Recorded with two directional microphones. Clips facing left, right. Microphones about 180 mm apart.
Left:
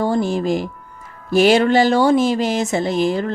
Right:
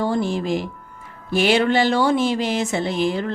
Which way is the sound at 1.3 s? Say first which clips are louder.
Left 4 dB; 40° left (ahead or behind).